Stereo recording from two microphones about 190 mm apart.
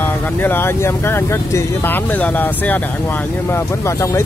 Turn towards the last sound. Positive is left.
turn(degrees=15)  # may be behind; listen again after turning